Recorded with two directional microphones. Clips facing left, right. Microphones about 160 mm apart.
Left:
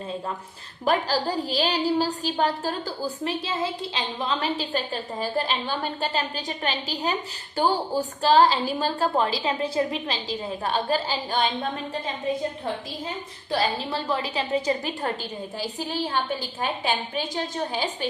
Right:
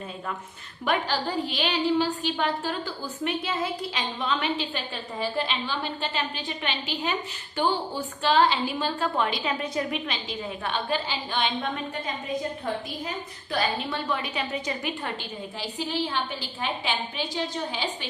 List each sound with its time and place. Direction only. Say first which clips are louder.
0.9 s a woman's voice: left 3 dB; 35° left (ahead or behind)
13.5 s a woman's voice: left 2 dB; 30° left (ahead or behind)